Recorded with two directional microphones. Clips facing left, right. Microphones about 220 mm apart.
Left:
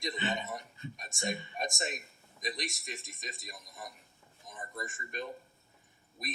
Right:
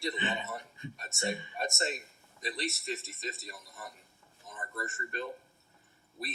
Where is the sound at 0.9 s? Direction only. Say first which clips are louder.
Right 2 dB; 15° left (ahead or behind).